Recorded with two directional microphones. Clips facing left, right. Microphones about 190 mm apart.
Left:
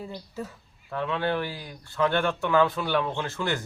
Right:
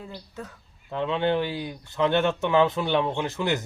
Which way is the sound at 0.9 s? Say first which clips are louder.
Right 3 dB; 20° right (ahead or behind).